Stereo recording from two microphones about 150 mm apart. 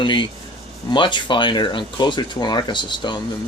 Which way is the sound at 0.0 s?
35° left (ahead or behind).